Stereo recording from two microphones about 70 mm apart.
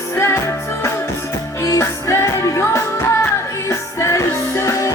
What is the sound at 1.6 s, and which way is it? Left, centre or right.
Music, left.